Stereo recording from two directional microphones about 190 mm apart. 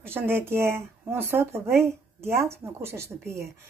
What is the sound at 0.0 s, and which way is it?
Speech, 10° right (ahead or behind).